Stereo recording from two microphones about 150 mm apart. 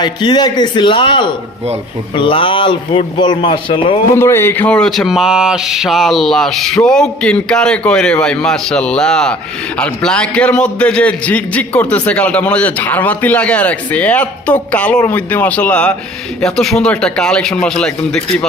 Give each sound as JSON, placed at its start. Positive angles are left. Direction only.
{"t": 0.0, "sound": "speech", "side_deg": 30}
{"t": 4.2, "sound": "a man's voice", "side_deg": 15}